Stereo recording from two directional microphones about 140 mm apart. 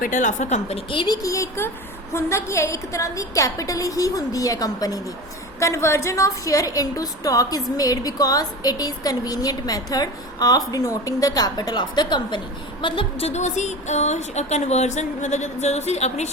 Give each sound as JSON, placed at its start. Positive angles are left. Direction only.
{"t": 0.0, "sound": "a woman's voice", "side_deg": 65}
{"t": 0.9, "sound": "a woman's voice", "side_deg": 35}
{"t": 12.8, "sound": "music", "side_deg": 40}